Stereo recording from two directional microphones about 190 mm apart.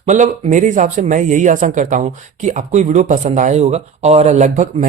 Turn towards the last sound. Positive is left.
turn(degrees=-40)  # may be behind; listen again after turning